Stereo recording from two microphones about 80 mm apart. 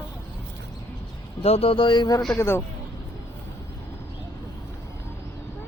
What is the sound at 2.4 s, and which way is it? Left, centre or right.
Speech, left.